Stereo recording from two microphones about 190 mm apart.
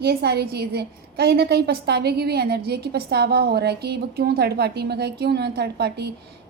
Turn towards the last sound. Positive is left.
turn(degrees=-60)  # may be behind; listen again after turning